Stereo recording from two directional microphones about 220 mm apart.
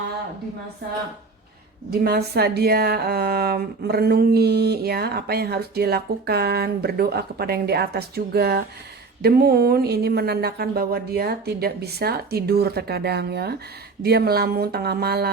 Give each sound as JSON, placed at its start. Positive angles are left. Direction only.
{"t": 1.9, "sound": "a woman's voice", "side_deg": -45}